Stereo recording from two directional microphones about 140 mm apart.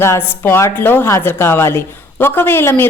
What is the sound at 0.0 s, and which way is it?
A woman's voice, 15° left (ahead or behind).